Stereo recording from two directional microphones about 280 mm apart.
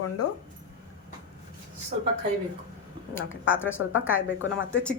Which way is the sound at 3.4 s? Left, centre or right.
Left.